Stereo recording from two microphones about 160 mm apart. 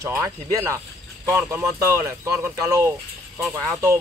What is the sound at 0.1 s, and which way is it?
Speech, 20° right (ahead or behind).